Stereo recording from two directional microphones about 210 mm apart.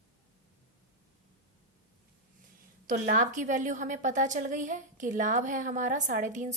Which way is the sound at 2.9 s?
40° right (ahead or behind).